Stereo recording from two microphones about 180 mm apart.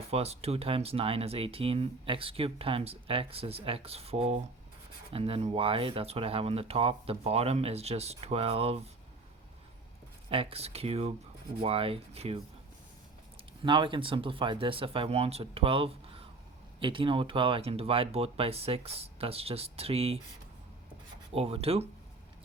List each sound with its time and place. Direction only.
0.1 s speech: 35° right (ahead or behind)
10.2 s speech: 30° right (ahead or behind)
13.6 s speech: 25° right (ahead or behind)
21.3 s speech: 30° right (ahead or behind)